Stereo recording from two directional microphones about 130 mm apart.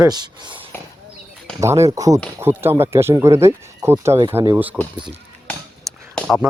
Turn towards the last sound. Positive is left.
turn(degrees=5)  # may be behind; listen again after turning